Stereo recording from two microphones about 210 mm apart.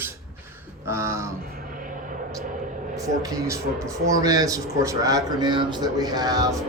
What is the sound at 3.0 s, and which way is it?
Speech, 15° right (ahead or behind).